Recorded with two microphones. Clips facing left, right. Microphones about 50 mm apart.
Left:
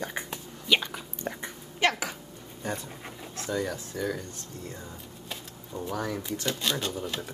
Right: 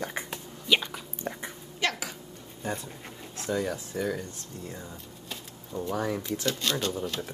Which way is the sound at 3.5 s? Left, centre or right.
Centre.